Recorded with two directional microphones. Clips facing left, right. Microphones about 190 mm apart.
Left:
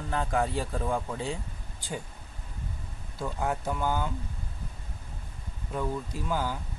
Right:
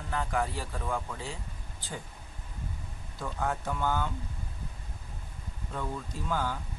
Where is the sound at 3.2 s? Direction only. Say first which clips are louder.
Left 2 dB; 10° left (ahead or behind).